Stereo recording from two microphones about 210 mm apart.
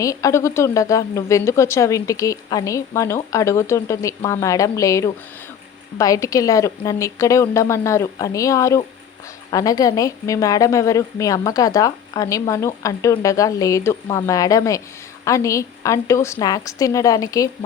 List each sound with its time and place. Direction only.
0.0 s a woman's voice: 15° left (ahead or behind)